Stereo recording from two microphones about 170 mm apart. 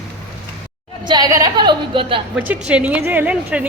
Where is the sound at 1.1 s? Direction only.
20° right (ahead or behind).